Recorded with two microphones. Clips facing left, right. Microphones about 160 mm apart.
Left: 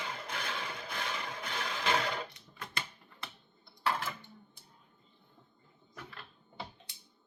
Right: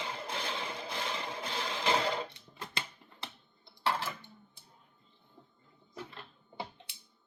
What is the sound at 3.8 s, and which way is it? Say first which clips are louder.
Dishes: right 1 dB; 30° right (ahead or behind).